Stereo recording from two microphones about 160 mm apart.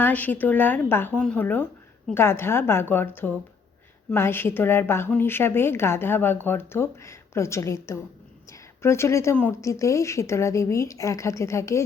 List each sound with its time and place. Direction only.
0.0 s a woman's voice: 10° left (ahead or behind)